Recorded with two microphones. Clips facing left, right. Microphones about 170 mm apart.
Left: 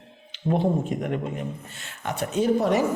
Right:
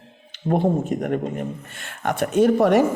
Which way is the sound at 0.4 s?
50° right (ahead or behind).